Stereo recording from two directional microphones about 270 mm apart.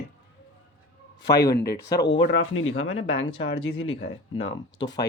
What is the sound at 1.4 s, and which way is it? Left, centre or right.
Speech, centre.